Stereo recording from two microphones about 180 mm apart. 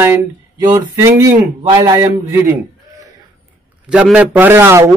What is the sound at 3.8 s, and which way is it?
A man's voice, 5° right (ahead or behind).